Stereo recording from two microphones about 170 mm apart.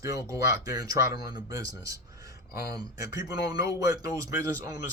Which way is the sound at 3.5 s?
20° right (ahead or behind).